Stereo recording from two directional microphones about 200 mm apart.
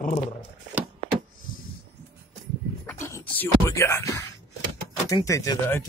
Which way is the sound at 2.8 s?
10° left (ahead or behind).